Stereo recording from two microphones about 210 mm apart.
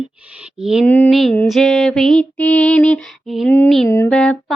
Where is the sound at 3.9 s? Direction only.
10° left (ahead or behind).